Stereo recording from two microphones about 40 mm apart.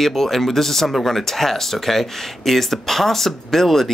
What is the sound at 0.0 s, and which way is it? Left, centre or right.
Speech, centre.